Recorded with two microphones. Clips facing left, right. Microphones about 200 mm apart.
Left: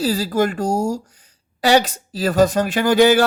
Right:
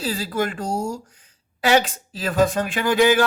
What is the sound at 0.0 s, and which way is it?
Speech, 40° left (ahead or behind).